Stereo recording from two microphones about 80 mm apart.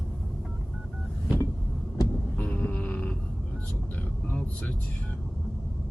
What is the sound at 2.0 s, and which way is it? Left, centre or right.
Heart sounds, left.